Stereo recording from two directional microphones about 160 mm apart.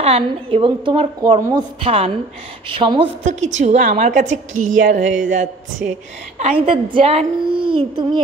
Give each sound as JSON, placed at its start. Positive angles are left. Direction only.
{"t": 0.0, "sound": "a woman's voice", "side_deg": -35}
{"t": 3.3, "sound": "a woman's voice", "side_deg": -45}
{"t": 6.3, "sound": "a woman's voice", "side_deg": -40}